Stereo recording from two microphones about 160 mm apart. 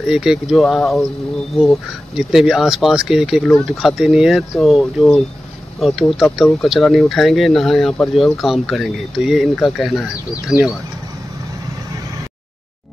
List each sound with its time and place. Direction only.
0.0 s speech: 5° right (ahead or behind)
10.3 s speech: 20° left (ahead or behind)